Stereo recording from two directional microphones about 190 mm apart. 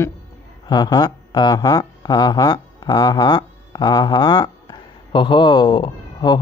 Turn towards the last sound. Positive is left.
turn(degrees=25)  # may be behind; listen again after turning